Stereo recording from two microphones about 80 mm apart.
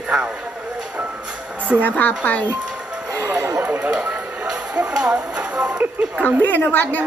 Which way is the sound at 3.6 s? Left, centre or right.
Right.